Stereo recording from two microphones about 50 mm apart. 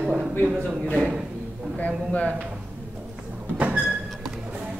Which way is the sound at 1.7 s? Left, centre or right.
Left.